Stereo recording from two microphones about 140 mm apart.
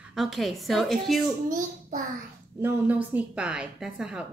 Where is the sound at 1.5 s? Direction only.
70° right (ahead or behind).